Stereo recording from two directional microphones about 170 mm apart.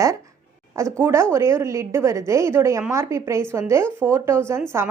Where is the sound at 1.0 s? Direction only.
15° right (ahead or behind).